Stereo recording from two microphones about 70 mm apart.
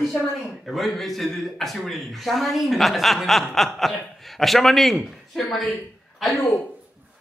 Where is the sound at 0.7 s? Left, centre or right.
Centre.